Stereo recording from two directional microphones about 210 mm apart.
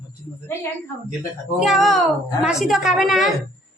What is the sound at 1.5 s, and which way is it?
A woman's voice, centre (ahead or behind).